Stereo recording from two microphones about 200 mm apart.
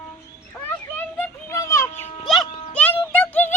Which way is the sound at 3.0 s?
10° left (ahead or behind).